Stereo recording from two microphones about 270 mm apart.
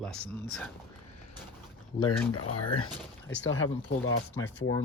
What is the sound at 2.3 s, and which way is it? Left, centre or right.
Speech, left.